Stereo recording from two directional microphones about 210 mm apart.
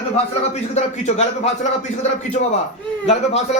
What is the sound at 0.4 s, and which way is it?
Speech, 35° left (ahead or behind).